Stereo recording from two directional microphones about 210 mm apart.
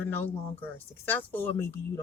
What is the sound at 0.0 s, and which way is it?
Speech, 10° left (ahead or behind).